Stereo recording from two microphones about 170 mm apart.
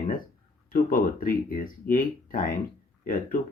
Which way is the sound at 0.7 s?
55° left (ahead or behind).